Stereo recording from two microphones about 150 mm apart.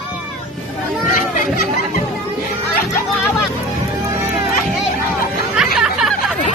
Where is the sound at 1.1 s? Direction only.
65° left (ahead or behind).